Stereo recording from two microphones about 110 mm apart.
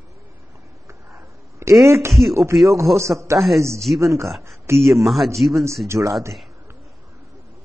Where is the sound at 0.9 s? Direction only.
25° right (ahead or behind).